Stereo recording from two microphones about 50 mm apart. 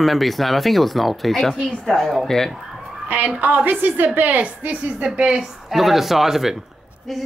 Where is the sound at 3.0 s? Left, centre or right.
Right.